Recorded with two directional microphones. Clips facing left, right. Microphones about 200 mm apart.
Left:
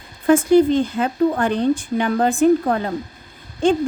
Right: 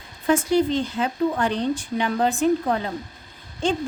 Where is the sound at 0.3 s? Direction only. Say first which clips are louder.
Left 6 dB; 50° left (ahead or behind).